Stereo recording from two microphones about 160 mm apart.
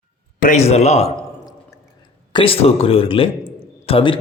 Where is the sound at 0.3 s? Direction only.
55° left (ahead or behind).